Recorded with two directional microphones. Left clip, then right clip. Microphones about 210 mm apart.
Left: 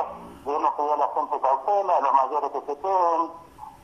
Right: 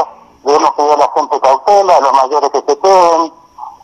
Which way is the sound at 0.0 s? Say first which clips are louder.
Right 14 dB; 45° right (ahead or behind).